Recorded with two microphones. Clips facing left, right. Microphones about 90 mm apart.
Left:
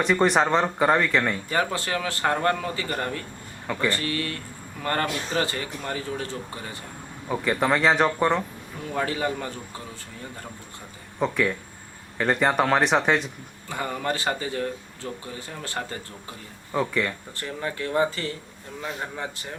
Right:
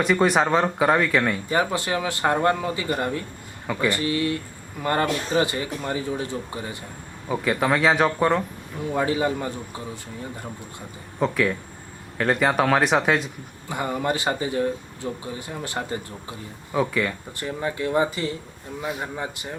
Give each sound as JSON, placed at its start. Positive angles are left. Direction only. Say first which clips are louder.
{"t": 0.0, "sound": "speech", "louder": "right 1 dB", "side_deg": 0}
{"t": 1.5, "sound": "speech", "louder": "right 3 dB", "side_deg": -20}
{"t": 7.3, "sound": "speech", "louder": "right 1 dB", "side_deg": -5}
{"t": 8.9, "sound": "speech", "louder": "right 4 dB", "side_deg": -15}
{"t": 11.2, "sound": "speech", "louder": "right 2 dB", "side_deg": 0}
{"t": 13.7, "sound": "speech", "louder": "right 3 dB", "side_deg": -20}
{"t": 16.7, "sound": "speech", "louder": "right 2 dB", "side_deg": -5}
{"t": 17.3, "sound": "speech", "louder": "right 3 dB", "side_deg": -15}